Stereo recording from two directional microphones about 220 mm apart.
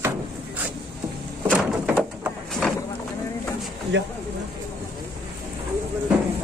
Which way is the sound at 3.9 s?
55° right (ahead or behind).